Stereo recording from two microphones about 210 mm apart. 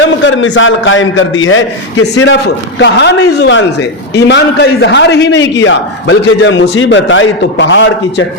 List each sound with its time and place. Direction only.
0.0 s a man's voice: 65° left (ahead or behind)